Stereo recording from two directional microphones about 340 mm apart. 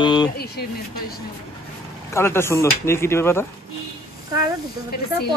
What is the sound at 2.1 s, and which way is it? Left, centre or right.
Speech, centre.